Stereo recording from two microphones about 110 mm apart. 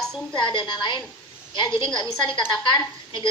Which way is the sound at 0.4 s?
45° left (ahead or behind).